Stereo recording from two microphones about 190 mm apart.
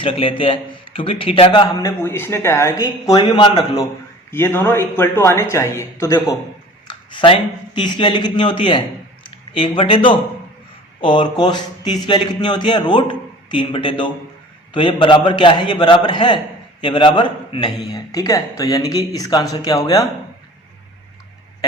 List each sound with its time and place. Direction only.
0.0 s a man's voice: 25° left (ahead or behind)
1.8 s speech: 10° left (ahead or behind)
4.3 s a man's voice: 10° left (ahead or behind)